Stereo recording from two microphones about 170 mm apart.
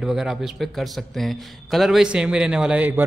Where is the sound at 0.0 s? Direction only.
5° right (ahead or behind).